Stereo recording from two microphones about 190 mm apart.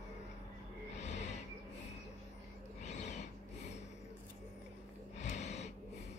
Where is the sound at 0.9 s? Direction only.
35° left (ahead or behind).